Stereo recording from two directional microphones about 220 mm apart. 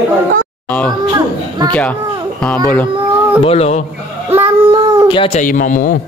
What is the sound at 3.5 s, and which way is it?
Speech, 30° left (ahead or behind).